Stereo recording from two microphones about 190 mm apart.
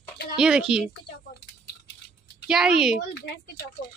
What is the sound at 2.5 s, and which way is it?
Speech, 5° right (ahead or behind).